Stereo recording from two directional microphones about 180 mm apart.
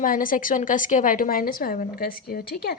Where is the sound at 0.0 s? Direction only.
50° left (ahead or behind).